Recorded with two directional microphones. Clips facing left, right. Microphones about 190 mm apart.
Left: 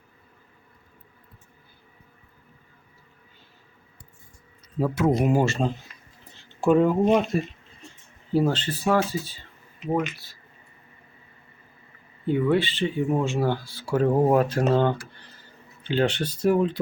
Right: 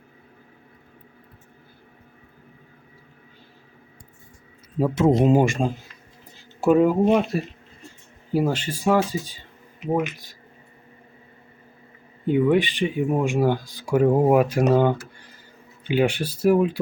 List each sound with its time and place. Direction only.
4.8 s speech: 25° right (ahead or behind)
12.2 s speech: 15° right (ahead or behind)
15.1 s a sound: 10° right (ahead or behind)
15.8 s speech: 10° right (ahead or behind)